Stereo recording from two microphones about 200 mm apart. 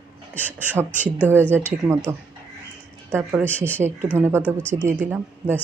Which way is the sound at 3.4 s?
5° left (ahead or behind).